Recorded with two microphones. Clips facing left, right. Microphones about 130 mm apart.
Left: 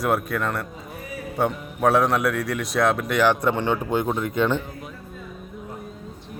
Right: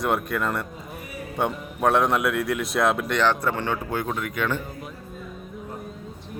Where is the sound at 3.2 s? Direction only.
15° left (ahead or behind).